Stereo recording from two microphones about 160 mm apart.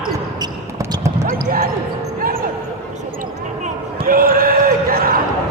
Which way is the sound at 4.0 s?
65° right (ahead or behind).